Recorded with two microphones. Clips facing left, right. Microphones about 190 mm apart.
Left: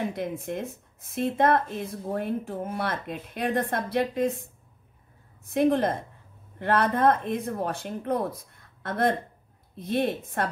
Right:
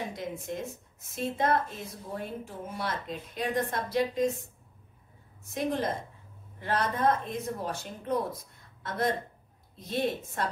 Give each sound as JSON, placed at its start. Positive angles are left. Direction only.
{"t": 0.1, "sound": "speech", "side_deg": 60}
{"t": 5.5, "sound": "speech", "side_deg": 55}